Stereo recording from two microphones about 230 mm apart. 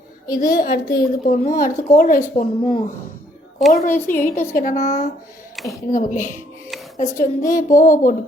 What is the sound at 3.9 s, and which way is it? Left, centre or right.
Speech, centre.